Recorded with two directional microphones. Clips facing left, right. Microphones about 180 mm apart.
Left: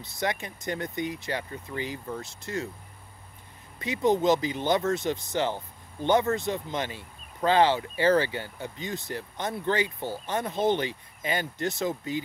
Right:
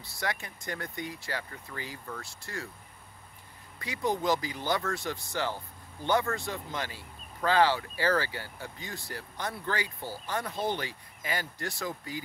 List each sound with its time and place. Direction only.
0.0 s speech: 20° left (ahead or behind)
3.8 s speech: 20° left (ahead or behind)